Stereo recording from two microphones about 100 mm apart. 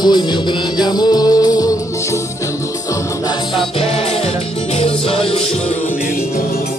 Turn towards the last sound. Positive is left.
turn(degrees=65)  # may be behind; listen again after turning